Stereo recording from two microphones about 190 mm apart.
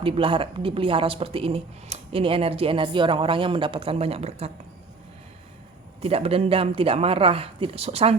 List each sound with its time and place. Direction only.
0.0 s speech: 30° right (ahead or behind)
6.0 s speech: 30° right (ahead or behind)